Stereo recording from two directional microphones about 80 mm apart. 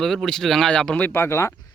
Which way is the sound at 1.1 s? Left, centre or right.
Left.